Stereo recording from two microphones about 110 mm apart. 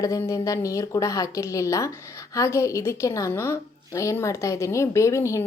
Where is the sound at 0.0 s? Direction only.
30° left (ahead or behind).